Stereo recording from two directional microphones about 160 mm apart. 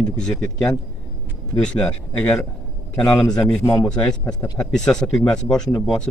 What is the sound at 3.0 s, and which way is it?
Speech, 25° left (ahead or behind).